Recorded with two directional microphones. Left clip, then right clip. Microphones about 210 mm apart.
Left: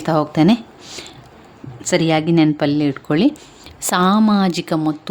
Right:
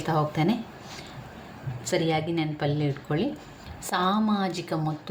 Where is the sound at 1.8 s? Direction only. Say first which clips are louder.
Left 9 dB; 55° left (ahead or behind).